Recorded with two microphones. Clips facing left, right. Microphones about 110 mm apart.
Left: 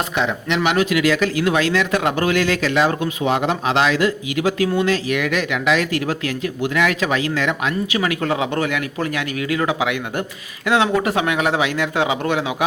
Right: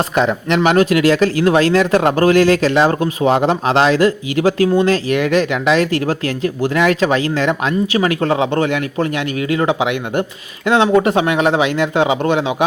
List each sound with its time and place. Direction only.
0.2 s speech: 40° right (ahead or behind); by 12.6 s 25° right (ahead or behind)